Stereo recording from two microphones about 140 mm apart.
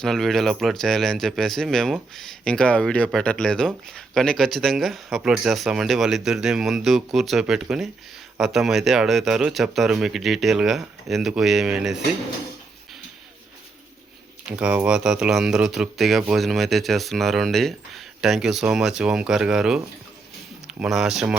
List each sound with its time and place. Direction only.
0.0 s speech: centre (ahead or behind)
14.4 s speech: 5° right (ahead or behind)